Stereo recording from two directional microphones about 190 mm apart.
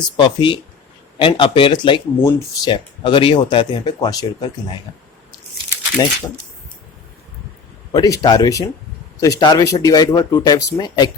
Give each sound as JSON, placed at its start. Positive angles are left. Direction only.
{"t": 0.2, "sound": "speech", "side_deg": 25}
{"t": 6.0, "sound": "speech", "side_deg": 20}
{"t": 7.9, "sound": "speech", "side_deg": 20}